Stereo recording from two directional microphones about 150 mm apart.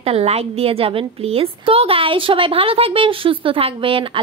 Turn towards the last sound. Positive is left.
turn(degrees=-35)  # may be behind; listen again after turning